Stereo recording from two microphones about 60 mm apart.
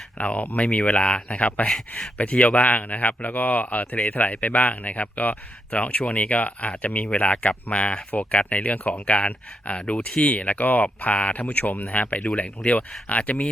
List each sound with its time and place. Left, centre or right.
0.2 s speech: left